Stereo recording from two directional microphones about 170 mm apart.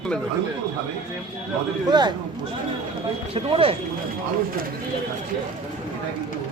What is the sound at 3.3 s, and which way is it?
Speech, 35° right (ahead or behind).